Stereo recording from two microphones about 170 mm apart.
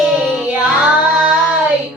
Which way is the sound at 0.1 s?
Centre (ahead or behind).